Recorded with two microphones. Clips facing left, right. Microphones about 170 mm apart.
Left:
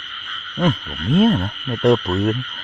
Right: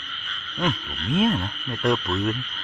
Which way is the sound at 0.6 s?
35° left (ahead or behind).